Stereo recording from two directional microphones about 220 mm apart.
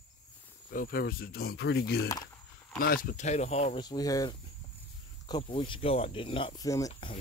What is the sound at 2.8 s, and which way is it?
Speech, 40° left (ahead or behind).